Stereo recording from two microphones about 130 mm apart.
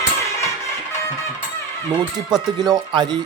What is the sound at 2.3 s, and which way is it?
Speech, 30° right (ahead or behind).